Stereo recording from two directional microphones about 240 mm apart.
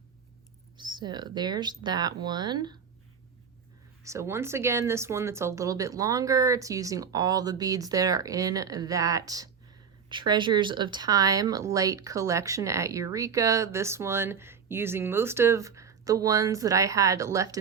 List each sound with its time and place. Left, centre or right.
0.8 s speech: centre
4.0 s speech: centre